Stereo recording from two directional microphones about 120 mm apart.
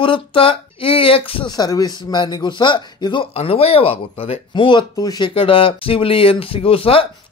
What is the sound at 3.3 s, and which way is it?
Speech, 55° left (ahead or behind).